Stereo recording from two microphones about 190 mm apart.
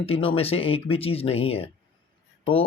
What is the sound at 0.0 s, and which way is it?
Speech, 30° left (ahead or behind).